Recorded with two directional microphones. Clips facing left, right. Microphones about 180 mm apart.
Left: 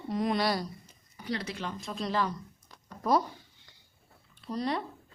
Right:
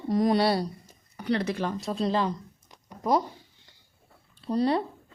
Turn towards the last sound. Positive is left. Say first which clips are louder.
# right 7 dB
turn(degrees=-30)  # may be behind; listen again after turning